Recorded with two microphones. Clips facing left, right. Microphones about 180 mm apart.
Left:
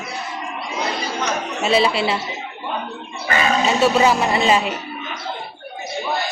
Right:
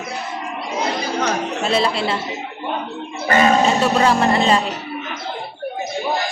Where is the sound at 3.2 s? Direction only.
40° right (ahead or behind).